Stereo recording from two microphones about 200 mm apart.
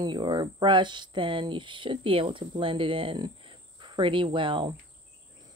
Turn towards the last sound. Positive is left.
turn(degrees=-25)  # may be behind; listen again after turning